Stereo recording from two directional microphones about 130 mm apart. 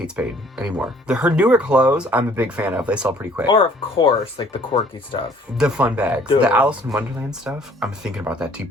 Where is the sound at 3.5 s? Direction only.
40° left (ahead or behind).